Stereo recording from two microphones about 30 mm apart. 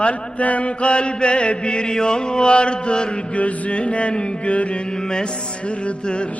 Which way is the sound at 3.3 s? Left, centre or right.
Left.